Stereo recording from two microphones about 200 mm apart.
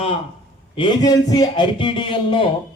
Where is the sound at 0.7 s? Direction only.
20° left (ahead or behind).